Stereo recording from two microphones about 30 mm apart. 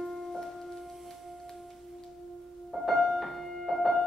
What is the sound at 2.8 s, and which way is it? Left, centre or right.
Music, centre.